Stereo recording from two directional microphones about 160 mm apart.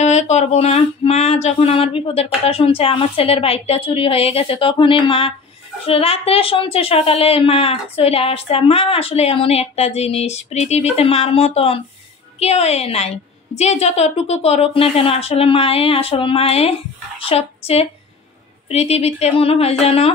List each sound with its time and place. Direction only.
0.0 s a woman's voice: 45° left (ahead or behind)